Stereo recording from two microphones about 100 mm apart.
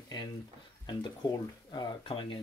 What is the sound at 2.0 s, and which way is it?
Speech, 60° left (ahead or behind).